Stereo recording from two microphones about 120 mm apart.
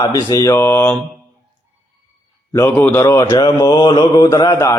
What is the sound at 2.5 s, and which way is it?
Speech, 20° left (ahead or behind).